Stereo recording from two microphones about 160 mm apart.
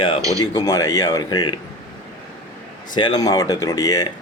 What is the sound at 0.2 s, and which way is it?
Speech, 20° right (ahead or behind).